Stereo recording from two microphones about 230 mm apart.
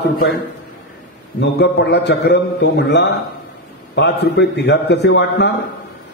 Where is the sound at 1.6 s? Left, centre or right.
Left.